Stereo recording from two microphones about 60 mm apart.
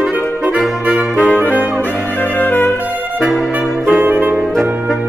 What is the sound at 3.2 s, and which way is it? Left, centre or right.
Music, centre.